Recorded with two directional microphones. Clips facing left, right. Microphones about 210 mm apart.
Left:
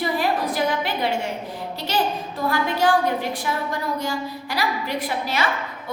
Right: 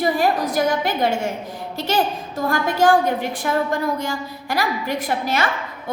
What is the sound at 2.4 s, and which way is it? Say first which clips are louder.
A woman's voice: right 3 dB; 45° right (ahead or behind).